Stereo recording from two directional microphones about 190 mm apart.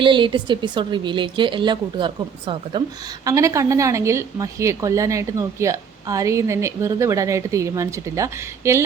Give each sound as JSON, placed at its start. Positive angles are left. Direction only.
{"t": 0.0, "sound": "a woman's voice", "side_deg": -25}